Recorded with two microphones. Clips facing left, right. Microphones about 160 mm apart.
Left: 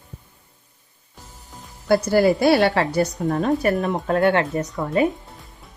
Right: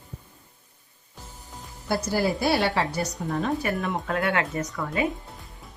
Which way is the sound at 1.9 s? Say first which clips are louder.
Left 8 dB; 75° left (ahead or behind).